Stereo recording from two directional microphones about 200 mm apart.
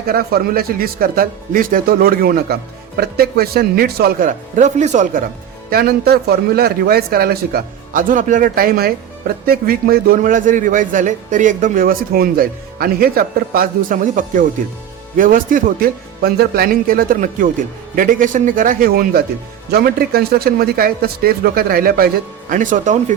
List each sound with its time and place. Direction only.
0.1 s a man's voice: 50° right (ahead or behind)
5.7 s a man's voice: 50° right (ahead or behind)